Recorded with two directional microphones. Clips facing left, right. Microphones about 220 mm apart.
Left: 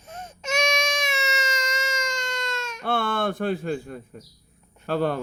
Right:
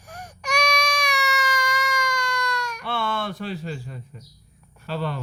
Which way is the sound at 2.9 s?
50° left (ahead or behind).